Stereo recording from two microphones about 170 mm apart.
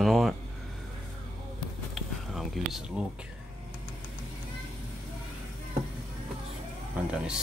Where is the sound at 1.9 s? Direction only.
Centre (ahead or behind).